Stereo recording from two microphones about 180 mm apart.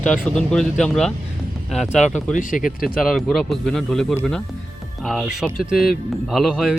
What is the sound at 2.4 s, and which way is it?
Speech, 45° left (ahead or behind).